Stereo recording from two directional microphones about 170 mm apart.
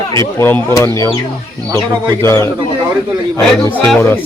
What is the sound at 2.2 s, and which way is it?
Speech, 15° left (ahead or behind).